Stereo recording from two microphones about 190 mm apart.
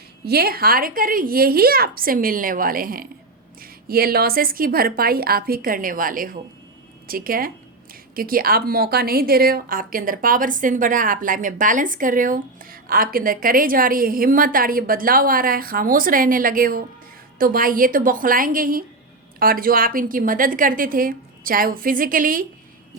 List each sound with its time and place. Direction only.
0.3 s a woman's voice: 55° right (ahead or behind)